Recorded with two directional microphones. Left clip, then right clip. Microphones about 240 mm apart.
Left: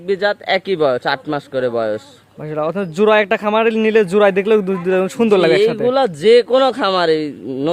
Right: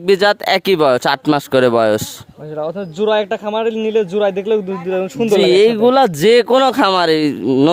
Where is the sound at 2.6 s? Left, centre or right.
Left.